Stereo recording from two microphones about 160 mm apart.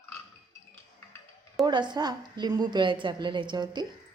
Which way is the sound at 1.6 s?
30° right (ahead or behind).